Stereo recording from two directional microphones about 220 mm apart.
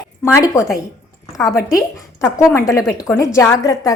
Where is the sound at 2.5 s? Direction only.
15° left (ahead or behind).